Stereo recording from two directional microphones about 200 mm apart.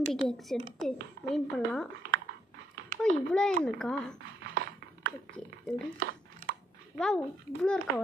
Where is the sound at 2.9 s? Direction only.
35° right (ahead or behind).